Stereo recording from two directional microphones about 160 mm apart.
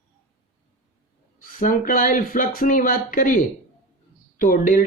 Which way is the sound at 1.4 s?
60° left (ahead or behind).